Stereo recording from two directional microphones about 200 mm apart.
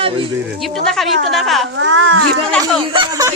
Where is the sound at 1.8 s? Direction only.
80° right.